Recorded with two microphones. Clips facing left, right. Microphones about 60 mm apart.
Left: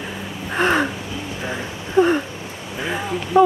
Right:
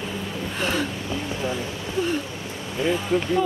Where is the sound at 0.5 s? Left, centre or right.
Left.